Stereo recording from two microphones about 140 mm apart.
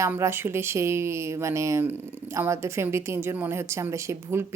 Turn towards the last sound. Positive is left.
turn(degrees=-20)  # may be behind; listen again after turning